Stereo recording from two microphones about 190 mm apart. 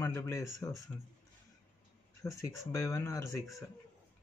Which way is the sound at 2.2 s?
15° left (ahead or behind).